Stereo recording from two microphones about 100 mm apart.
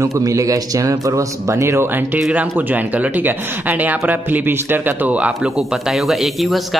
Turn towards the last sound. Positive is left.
turn(degrees=0)  # may be behind; listen again after turning